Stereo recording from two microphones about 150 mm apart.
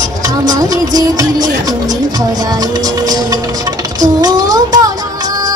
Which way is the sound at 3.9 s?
25° right (ahead or behind).